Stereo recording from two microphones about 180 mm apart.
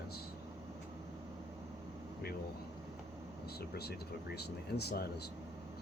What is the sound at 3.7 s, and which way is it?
Speech, 60° left (ahead or behind).